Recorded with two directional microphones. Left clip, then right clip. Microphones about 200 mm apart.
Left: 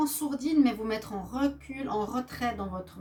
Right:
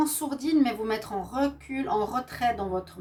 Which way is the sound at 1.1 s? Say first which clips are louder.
Right 3 dB; 30° right (ahead or behind).